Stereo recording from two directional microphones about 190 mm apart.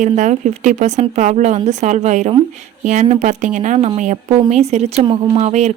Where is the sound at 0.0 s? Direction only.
40° right (ahead or behind).